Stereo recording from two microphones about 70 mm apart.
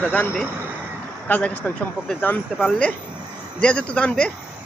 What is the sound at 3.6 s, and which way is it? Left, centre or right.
Speech, centre.